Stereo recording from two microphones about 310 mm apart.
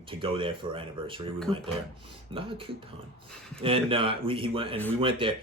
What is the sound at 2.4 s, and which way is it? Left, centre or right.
Speech, centre.